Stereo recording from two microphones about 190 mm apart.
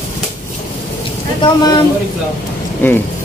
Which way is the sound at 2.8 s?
10° left (ahead or behind).